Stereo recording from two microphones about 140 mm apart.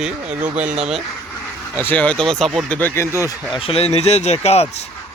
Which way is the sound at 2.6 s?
15° left (ahead or behind).